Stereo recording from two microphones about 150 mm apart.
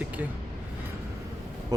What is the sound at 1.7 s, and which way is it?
Speech, 25° right (ahead or behind).